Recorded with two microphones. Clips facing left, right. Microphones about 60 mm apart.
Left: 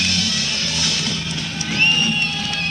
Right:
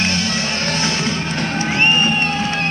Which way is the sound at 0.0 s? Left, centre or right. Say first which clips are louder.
Right 3 dB; right.